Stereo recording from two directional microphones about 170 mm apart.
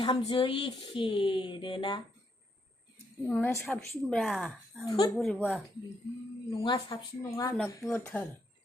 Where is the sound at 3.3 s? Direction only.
10° left (ahead or behind).